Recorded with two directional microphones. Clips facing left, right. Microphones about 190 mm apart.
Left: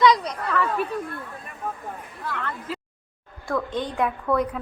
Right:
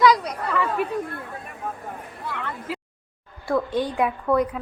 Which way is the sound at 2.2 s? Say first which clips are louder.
Even; 15° right (ahead or behind).